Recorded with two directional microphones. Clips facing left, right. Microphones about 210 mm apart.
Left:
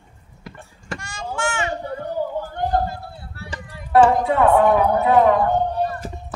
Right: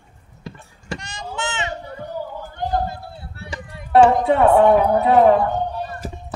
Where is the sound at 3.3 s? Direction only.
20° right (ahead or behind).